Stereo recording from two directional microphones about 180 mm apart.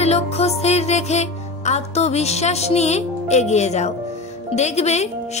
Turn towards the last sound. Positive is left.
turn(degrees=40)  # may be behind; listen again after turning